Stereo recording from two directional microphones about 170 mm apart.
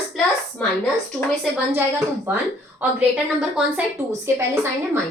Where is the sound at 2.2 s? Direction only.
10° right (ahead or behind).